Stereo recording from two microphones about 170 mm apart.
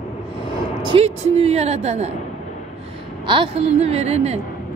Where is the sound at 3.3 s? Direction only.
35° right (ahead or behind).